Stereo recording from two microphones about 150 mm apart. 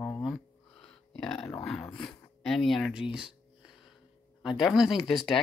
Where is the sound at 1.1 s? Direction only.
Centre (ahead or behind).